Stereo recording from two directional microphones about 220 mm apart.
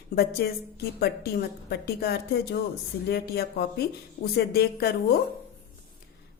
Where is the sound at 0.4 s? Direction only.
45° left (ahead or behind).